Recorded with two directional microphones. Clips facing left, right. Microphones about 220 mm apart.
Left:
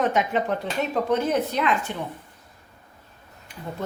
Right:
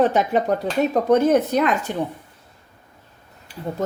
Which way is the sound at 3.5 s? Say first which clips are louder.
Right 5 dB; 30° right (ahead or behind).